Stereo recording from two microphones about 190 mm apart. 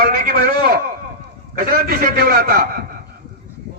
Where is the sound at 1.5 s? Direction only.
50° right (ahead or behind).